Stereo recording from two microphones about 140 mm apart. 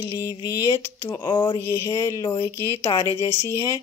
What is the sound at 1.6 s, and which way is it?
Speech, 20° left (ahead or behind).